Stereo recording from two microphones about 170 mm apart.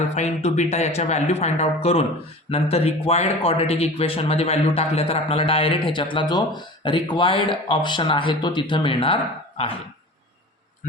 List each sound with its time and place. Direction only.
0.2 s speech: 40° left (ahead or behind)